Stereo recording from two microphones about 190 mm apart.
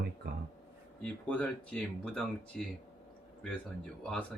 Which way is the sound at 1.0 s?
5° left (ahead or behind).